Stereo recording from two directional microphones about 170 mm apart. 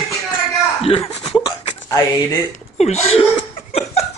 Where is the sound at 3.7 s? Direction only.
40° left (ahead or behind).